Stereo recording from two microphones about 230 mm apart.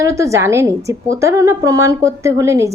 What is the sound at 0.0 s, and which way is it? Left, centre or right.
A woman's voice, centre.